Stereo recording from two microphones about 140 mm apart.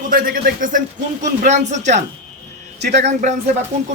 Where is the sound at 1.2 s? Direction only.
60° right (ahead or behind).